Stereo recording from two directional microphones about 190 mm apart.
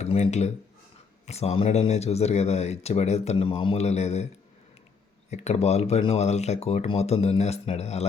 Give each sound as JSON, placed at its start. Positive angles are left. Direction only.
{"t": 0.0, "sound": "speech", "side_deg": 35}
{"t": 5.3, "sound": "speech", "side_deg": 35}